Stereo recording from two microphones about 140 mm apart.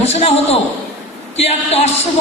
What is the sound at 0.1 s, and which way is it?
Speech, 50° left (ahead or behind).